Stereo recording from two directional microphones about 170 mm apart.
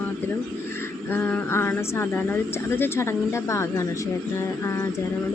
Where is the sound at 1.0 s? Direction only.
10° left (ahead or behind).